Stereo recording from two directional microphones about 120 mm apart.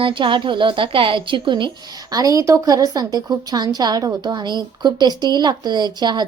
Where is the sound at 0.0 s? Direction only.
45° right (ahead or behind).